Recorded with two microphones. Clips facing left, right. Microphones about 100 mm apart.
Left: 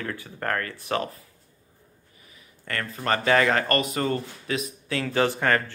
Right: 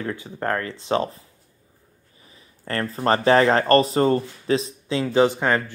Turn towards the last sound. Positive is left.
turn(degrees=-20)  # may be behind; listen again after turning